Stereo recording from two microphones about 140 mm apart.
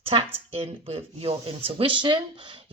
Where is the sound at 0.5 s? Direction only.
45° right (ahead or behind).